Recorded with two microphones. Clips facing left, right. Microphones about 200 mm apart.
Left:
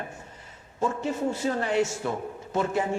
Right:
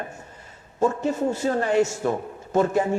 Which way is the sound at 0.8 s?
40° right (ahead or behind).